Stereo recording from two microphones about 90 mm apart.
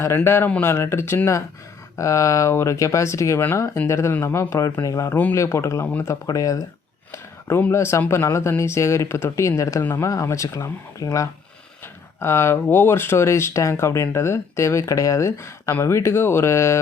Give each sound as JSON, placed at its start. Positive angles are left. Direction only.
{"t": 0.3, "sound": "speech", "side_deg": 25}
{"t": 7.1, "sound": "speech", "side_deg": 25}